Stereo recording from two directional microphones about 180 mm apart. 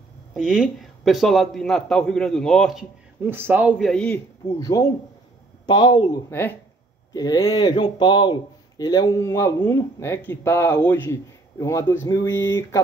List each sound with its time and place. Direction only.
0.3 s speech: centre (ahead or behind)
3.3 s a man's voice: 10° right (ahead or behind)
3.7 s speech: 5° left (ahead or behind)
4.6 s speech: 20° left (ahead or behind)